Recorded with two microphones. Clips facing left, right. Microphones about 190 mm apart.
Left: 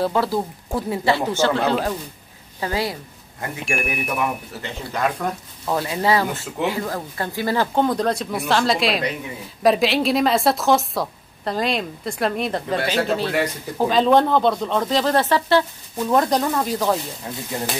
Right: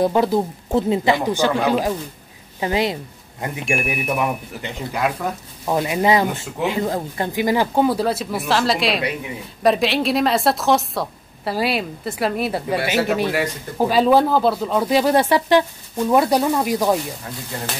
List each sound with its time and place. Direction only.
0.0 s a woman's voice: 15° right (ahead or behind)
4.6 s speech: 5° right (ahead or behind)
5.8 s speech: 15° right (ahead or behind)